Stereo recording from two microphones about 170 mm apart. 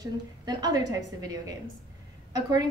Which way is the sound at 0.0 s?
25° right (ahead or behind).